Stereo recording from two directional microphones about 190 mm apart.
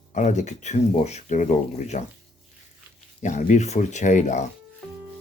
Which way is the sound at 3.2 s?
40° left (ahead or behind).